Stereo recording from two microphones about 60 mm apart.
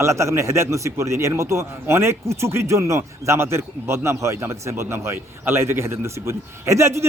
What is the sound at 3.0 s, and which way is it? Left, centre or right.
A man's voice, right.